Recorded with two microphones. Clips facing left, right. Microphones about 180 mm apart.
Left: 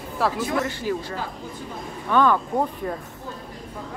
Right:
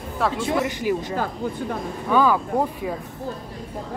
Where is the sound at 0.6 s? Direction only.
15° right (ahead or behind).